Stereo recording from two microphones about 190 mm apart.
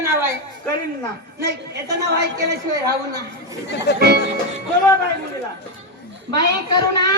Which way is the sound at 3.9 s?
60° left (ahead or behind).